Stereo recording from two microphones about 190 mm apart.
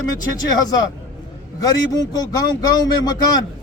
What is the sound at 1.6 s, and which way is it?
Speech, 20° left (ahead or behind).